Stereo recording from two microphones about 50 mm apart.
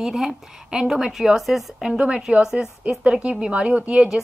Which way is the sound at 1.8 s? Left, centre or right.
Centre.